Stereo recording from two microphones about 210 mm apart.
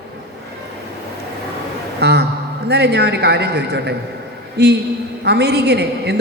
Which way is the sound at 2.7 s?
50° right (ahead or behind).